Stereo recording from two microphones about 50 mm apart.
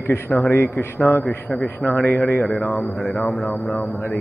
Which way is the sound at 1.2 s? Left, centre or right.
Left.